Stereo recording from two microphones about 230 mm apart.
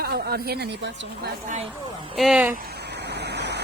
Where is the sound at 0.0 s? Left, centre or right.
Right.